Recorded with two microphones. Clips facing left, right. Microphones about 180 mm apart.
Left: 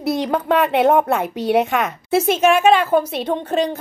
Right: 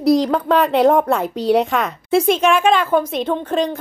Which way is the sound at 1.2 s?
65° left (ahead or behind).